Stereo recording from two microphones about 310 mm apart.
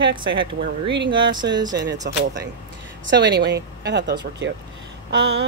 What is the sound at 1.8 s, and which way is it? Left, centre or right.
Speech, right.